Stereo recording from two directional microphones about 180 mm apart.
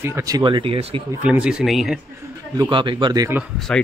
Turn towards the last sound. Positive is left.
turn(degrees=5)  # may be behind; listen again after turning